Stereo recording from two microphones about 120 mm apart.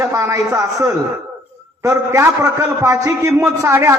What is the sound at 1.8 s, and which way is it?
A man's voice, 25° right (ahead or behind).